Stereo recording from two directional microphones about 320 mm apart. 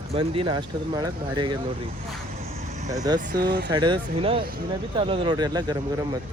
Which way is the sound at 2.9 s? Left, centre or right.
Centre.